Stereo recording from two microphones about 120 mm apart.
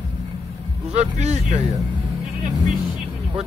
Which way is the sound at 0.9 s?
65° right (ahead or behind).